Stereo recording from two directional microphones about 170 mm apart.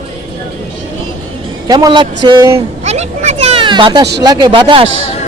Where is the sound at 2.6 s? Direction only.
40° right (ahead or behind).